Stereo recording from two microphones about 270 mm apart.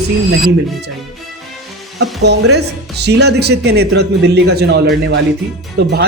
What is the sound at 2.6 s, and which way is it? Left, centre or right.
Speech, right.